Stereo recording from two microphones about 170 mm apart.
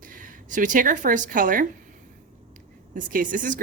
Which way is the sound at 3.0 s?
50° right (ahead or behind).